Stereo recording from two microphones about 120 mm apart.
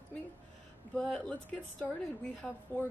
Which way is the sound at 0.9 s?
5° left (ahead or behind).